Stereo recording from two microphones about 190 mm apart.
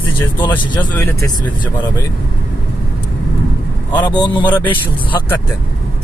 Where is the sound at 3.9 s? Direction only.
20° left (ahead or behind).